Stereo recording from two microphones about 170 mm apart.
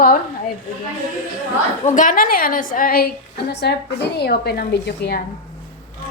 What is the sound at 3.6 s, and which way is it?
A woman's voice, 75° left (ahead or behind).